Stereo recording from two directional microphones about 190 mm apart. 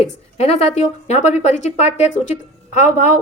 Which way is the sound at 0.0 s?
35° left (ahead or behind).